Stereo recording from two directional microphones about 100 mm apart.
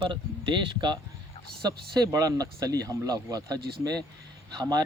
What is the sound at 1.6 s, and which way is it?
Speech, 40° right (ahead or behind).